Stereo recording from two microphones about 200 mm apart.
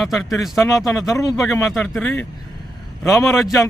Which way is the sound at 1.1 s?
15° left (ahead or behind).